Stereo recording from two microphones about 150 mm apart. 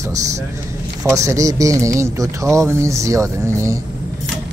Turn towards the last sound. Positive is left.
turn(degrees=-20)  # may be behind; listen again after turning